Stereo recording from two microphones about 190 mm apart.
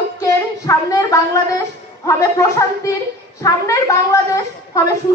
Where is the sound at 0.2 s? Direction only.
15° left (ahead or behind).